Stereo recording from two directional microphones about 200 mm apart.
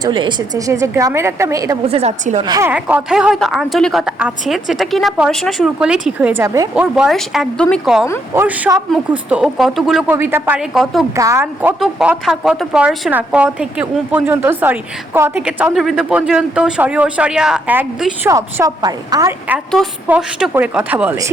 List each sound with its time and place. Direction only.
0.0 s speech: 25° right (ahead or behind)
1.9 s a woman's voice: 30° right (ahead or behind)
2.4 s a woman's voice: 15° right (ahead or behind)
6.7 s a woman's voice: 5° right (ahead or behind)
8.3 s speech: 10° right (ahead or behind)
11.1 s speech: 15° right (ahead or behind)
11.8 s a woman's voice: centre (ahead or behind); by 19.3 s 20° right (ahead or behind)
19.5 s speech: centre (ahead or behind)